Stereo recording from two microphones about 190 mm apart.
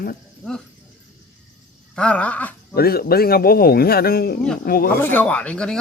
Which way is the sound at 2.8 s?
55° left (ahead or behind).